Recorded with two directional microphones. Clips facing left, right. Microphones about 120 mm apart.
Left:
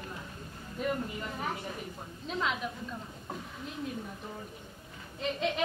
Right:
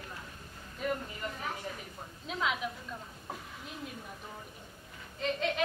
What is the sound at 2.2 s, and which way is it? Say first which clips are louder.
Speech: left 1 dB; 5° right (ahead or behind).